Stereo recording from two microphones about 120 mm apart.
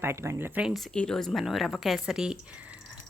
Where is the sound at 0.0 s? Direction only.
20° right (ahead or behind).